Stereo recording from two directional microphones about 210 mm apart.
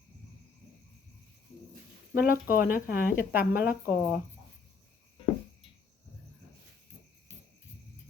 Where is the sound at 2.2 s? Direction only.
40° left (ahead or behind).